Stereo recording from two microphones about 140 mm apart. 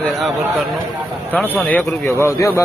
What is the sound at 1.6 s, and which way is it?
Speech, 10° left (ahead or behind).